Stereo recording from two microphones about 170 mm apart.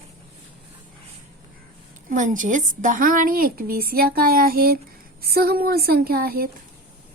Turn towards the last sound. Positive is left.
turn(degrees=-60)  # may be behind; listen again after turning